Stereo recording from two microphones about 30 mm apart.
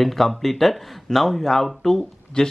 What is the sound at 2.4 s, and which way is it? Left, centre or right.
Speech, left.